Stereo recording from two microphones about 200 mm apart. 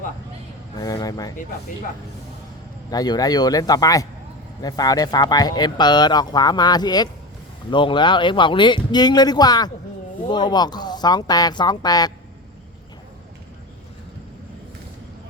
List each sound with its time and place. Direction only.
0.8 s speech: 20° left (ahead or behind)
2.9 s speech: 20° left (ahead or behind)